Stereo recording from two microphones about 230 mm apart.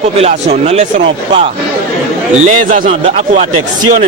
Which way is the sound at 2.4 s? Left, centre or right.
Right.